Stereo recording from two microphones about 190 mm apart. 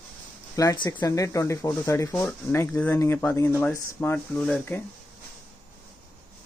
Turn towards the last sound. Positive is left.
turn(degrees=10)  # may be behind; listen again after turning